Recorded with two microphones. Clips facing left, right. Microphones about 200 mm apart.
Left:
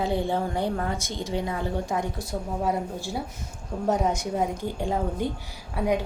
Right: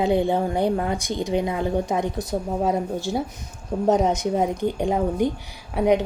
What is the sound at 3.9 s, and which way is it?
Speech, 20° right (ahead or behind).